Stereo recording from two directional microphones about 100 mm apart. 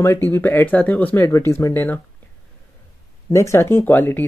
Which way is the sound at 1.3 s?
30° left (ahead or behind).